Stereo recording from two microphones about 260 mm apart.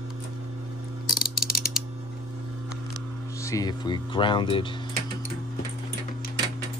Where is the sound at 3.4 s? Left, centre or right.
Centre.